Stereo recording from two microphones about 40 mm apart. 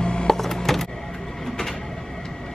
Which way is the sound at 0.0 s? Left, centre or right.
Left.